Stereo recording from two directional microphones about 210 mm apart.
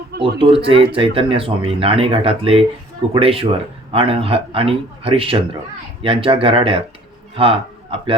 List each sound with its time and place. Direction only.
0.2 s a man's voice: 25° right (ahead or behind)